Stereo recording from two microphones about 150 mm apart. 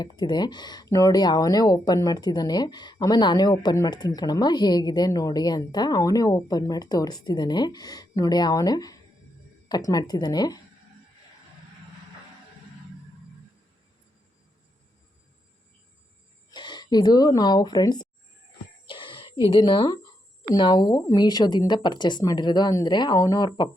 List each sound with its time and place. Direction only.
0.0 s speech: 30° left (ahead or behind)
16.5 s speech: 30° left (ahead or behind)
18.9 s a sound: 35° left (ahead or behind)
20.5 s speech: 30° left (ahead or behind)